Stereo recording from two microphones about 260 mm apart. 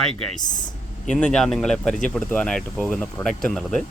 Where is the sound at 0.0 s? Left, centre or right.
Centre.